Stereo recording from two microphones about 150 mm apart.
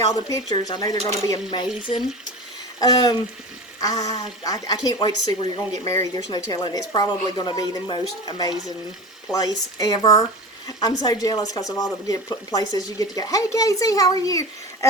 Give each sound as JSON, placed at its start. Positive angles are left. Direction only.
{"t": 0.1, "sound": "speech", "side_deg": 25}
{"t": 2.8, "sound": "speech", "side_deg": 25}